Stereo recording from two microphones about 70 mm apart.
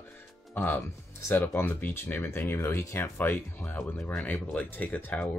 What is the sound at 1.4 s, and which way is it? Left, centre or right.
Speech, left.